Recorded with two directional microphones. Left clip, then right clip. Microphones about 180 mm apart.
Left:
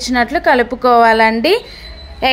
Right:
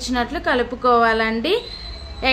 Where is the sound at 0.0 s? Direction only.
35° left (ahead or behind).